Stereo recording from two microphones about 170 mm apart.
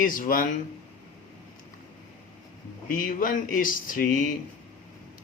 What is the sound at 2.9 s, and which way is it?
Speech, 55° left (ahead or behind).